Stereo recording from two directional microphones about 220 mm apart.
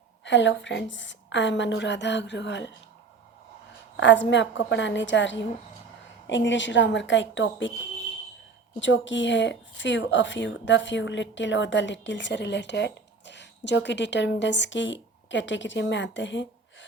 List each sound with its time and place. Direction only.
0.3 s a woman's voice: 55° left (ahead or behind)
3.9 s a woman's voice: 55° left (ahead or behind)
8.8 s a woman's voice: 55° left (ahead or behind)